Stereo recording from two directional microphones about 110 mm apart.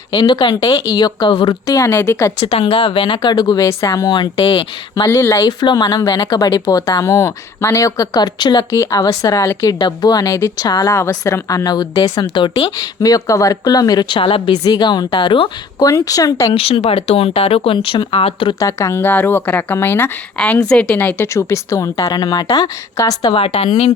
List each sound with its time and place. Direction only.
0.1 s speech: 40° left (ahead or behind)
1.6 s speech: 30° left (ahead or behind)
2.5 s speech: 55° left (ahead or behind)
5.0 s speech: 25° left (ahead or behind)
7.0 s speech: 25° left (ahead or behind); by 8.6 s 40° left (ahead or behind)
8.7 s speech: 30° left (ahead or behind)
12.2 s speech: 50° left (ahead or behind)
12.7 s speech: 35° left (ahead or behind); by 14.5 s 55° left (ahead or behind)
14.6 s speech: 40° left (ahead or behind)
15.8 s speech: 30° left (ahead or behind)
16.6 s speech: 60° left (ahead or behind)
18.6 s a woman's voice: 25° left (ahead or behind)
21.3 s speech: 25° left (ahead or behind)
23.3 s speech: 60° left (ahead or behind)